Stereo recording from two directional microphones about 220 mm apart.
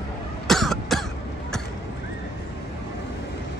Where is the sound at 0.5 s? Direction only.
Centre (ahead or behind).